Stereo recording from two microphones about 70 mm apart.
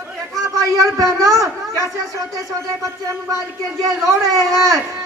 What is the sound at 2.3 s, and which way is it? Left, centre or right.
Speech, right.